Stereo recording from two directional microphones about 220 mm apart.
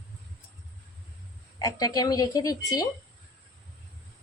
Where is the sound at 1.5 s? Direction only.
15° left (ahead or behind).